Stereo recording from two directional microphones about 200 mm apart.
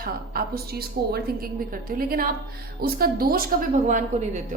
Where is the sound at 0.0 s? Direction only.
50° right (ahead or behind).